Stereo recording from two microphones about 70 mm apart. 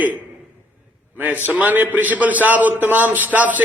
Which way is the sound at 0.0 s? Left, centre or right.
Right.